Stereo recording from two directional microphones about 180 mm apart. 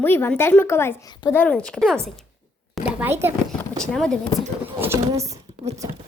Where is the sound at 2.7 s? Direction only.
10° right (ahead or behind).